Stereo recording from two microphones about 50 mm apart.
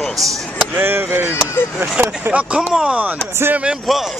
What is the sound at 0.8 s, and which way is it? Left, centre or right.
Speech, right.